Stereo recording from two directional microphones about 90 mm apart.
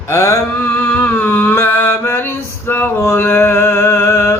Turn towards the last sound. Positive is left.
turn(degrees=25)  # may be behind; listen again after turning